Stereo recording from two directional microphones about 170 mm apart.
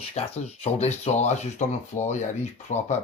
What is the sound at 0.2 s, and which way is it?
Speech, 35° left (ahead or behind).